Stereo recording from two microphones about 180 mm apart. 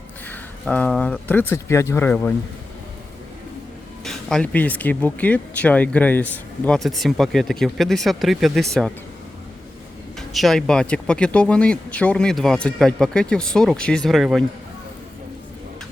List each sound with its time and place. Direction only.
0.3 s speech: 5° left (ahead or behind)
4.0 s speech: 5° left (ahead or behind)
10.2 s speech: centre (ahead or behind)